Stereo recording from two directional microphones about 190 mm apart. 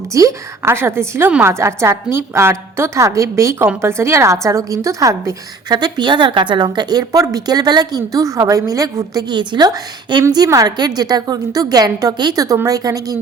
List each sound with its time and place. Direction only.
0.1 s a woman's voice: 15° right (ahead or behind)